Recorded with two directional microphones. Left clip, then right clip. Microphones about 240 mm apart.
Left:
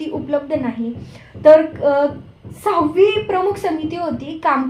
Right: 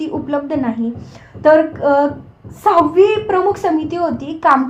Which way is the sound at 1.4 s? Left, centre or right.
Right.